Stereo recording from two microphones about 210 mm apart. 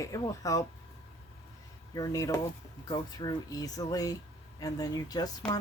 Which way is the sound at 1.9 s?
15° left (ahead or behind).